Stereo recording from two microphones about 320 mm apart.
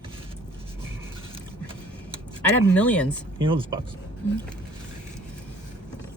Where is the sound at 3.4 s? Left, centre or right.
Centre.